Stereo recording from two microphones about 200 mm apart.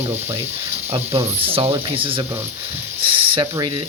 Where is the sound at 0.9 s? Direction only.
30° right (ahead or behind).